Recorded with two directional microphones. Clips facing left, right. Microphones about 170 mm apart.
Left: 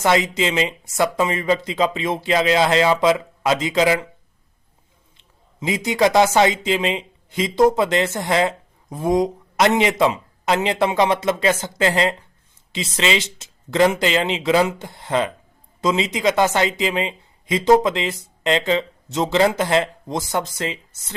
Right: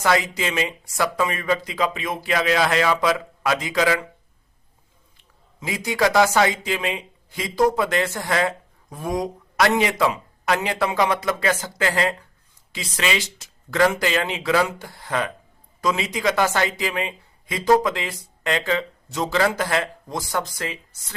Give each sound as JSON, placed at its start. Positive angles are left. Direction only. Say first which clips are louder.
{"t": 0.0, "sound": "speech", "louder": "left 3 dB", "side_deg": 20}
{"t": 5.1, "sound": "speech", "louder": "left 1 dB", "side_deg": 20}